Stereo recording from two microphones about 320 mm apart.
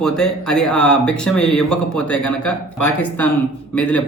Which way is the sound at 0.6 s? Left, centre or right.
Left.